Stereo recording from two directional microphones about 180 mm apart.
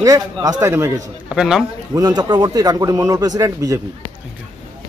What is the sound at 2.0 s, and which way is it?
A man's voice, 20° right (ahead or behind).